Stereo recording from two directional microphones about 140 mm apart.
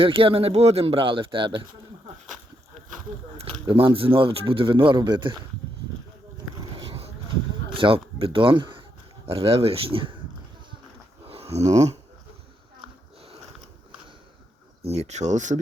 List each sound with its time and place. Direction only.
0.0 s speech: 40° right (ahead or behind)
3.3 s speech: 40° right (ahead or behind)
6.6 s a sound: 35° right (ahead or behind)
7.8 s speech: 40° right (ahead or behind)
11.5 s speech: 50° right (ahead or behind)
14.8 s speech: 50° right (ahead or behind)